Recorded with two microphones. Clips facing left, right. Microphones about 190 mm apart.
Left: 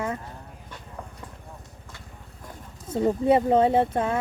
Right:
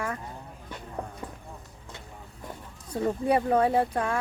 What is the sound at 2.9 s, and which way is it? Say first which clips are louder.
Speech: left 5 dB; 25° left (ahead or behind).